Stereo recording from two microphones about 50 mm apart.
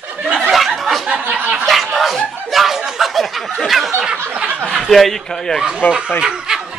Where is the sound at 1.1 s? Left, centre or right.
Right.